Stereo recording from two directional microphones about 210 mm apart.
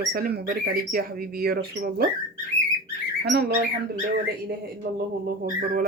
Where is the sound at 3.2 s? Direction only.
50° right (ahead or behind).